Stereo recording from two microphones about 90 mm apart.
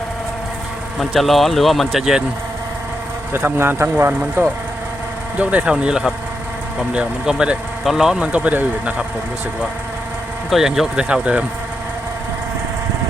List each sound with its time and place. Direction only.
0.9 s speech: centre (ahead or behind)
3.3 s speech: 25° right (ahead or behind)
5.4 s speech: 15° right (ahead or behind)
10.5 s speech: 5° right (ahead or behind)